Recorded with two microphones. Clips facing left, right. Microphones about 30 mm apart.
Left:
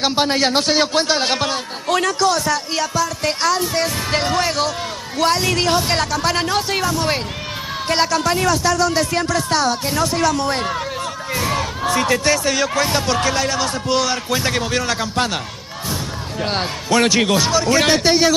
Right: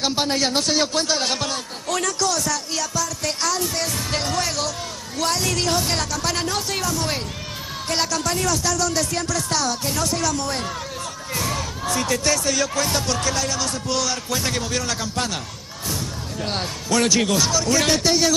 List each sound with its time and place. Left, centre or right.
0.0 s a man's voice: left